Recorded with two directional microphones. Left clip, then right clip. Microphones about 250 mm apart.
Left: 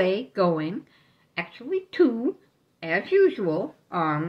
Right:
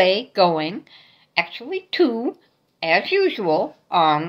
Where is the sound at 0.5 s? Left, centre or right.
Right.